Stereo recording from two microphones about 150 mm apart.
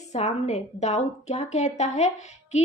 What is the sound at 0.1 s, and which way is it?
A woman's voice, 50° left (ahead or behind).